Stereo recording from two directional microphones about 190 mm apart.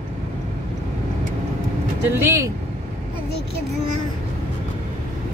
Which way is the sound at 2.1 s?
15° right (ahead or behind).